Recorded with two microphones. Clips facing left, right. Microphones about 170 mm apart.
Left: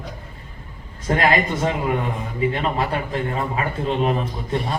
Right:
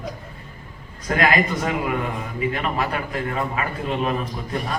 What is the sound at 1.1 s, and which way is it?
A man's voice, 30° left (ahead or behind).